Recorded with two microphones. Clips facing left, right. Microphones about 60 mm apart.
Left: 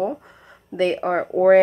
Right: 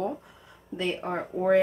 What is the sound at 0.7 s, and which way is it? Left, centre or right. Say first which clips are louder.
Speech: left 9 dB; left.